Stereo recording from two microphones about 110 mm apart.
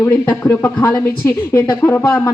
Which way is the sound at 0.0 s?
20° left (ahead or behind).